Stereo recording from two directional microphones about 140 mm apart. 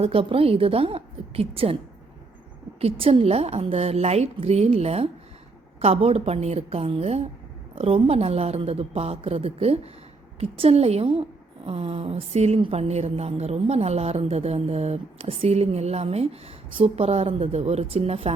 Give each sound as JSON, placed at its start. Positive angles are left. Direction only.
{"t": 0.0, "sound": "a woman's voice", "side_deg": -40}
{"t": 2.8, "sound": "a woman's voice", "side_deg": -45}